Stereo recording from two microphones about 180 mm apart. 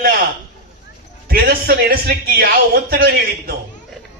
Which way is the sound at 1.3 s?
55° right (ahead or behind).